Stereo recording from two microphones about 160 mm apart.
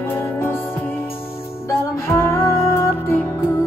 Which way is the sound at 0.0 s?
15° left (ahead or behind).